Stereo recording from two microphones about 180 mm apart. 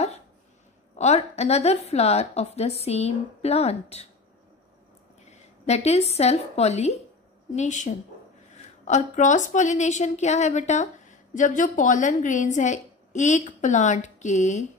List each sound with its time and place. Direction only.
0.9 s a woman's voice: 40° left (ahead or behind)
5.2 s a woman's voice: 40° left (ahead or behind)